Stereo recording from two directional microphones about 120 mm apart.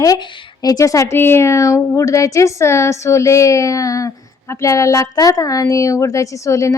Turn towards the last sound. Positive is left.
turn(degrees=25)  # may be behind; listen again after turning